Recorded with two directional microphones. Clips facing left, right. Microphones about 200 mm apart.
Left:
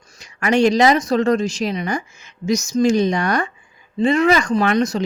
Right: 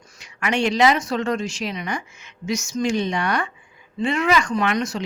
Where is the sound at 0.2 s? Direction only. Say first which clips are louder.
Left 7 dB; 40° left (ahead or behind).